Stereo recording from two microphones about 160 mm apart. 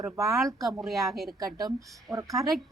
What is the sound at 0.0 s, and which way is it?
Speech, 20° right (ahead or behind).